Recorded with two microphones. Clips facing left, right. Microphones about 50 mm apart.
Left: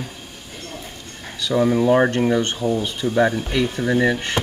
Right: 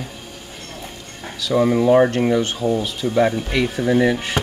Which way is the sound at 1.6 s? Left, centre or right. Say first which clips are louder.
Right 1 dB; centre.